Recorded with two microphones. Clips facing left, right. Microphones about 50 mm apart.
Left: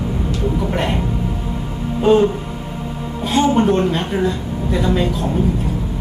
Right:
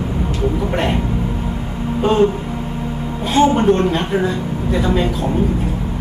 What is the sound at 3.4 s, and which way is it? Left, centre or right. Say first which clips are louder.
A woman's voice: right 2 dB; centre.